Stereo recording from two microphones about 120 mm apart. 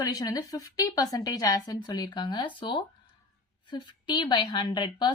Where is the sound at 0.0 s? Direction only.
30° left (ahead or behind).